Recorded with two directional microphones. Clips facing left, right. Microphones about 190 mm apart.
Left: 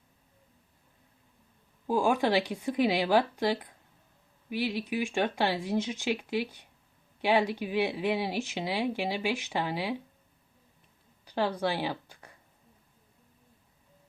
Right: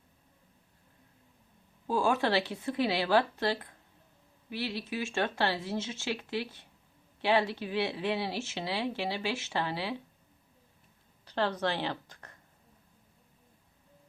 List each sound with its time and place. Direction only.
1.9 s speech: 15° left (ahead or behind)
11.3 s speech: 10° left (ahead or behind)